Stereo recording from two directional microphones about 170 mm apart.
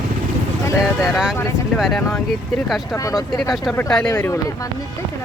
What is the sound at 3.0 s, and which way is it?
Speech, 20° left (ahead or behind).